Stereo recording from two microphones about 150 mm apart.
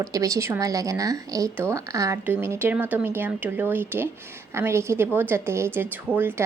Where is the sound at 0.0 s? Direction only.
20° right (ahead or behind).